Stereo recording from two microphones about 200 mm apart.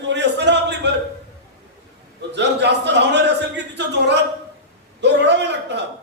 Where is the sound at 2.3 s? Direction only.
60° right (ahead or behind).